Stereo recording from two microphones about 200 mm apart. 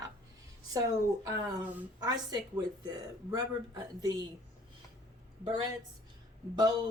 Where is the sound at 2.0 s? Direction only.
20° right (ahead or behind).